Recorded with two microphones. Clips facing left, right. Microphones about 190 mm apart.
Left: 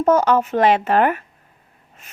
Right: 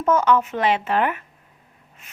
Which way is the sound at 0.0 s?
40° left (ahead or behind).